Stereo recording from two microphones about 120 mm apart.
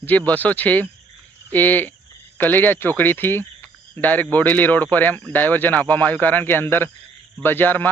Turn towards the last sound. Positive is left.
turn(degrees=15)  # may be behind; listen again after turning